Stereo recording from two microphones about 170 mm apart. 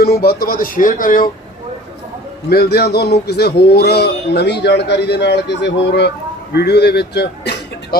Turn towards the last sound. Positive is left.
turn(degrees=75)  # may be behind; listen again after turning